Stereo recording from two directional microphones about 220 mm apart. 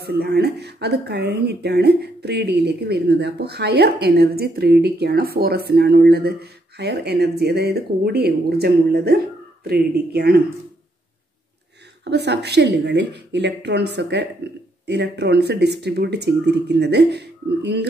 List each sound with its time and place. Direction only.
0.0 s speech: 45° right (ahead or behind)
12.0 s speech: 50° right (ahead or behind)